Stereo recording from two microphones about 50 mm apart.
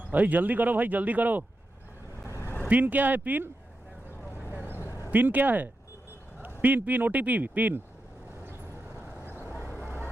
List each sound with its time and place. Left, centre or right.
0.1 s speech: right
2.2 s vehicle: left
2.6 s speech: right
4.8 s a sound: left
5.1 s speech: right
9.6 s vehicle: left